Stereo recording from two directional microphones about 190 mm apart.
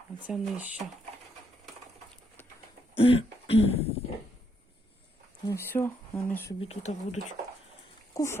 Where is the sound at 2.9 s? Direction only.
30° left (ahead or behind).